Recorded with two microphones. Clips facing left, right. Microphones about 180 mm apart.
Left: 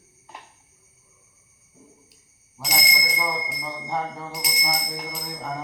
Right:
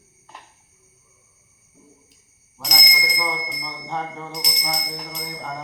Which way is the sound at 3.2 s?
5° left (ahead or behind).